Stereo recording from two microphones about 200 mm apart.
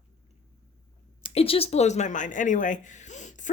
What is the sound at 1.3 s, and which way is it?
A woman's voice, 30° left (ahead or behind).